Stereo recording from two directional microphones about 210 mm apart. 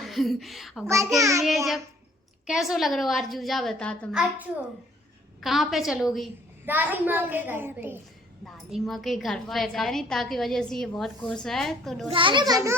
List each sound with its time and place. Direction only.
0.0 s a woman's voice: centre (ahead or behind)
4.2 s a woman's voice: 5° right (ahead or behind)
8.4 s a woman's voice: centre (ahead or behind)
12.1 s a child's voice: 25° right (ahead or behind)